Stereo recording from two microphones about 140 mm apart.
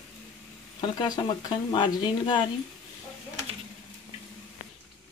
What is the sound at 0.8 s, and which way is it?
Speech, 30° left (ahead or behind).